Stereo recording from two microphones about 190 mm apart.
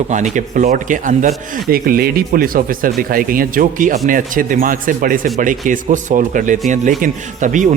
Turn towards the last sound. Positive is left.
turn(degrees=-40)  # may be behind; listen again after turning